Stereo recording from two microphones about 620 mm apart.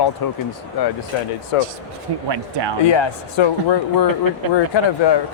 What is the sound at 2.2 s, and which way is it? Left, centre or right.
Speech, right.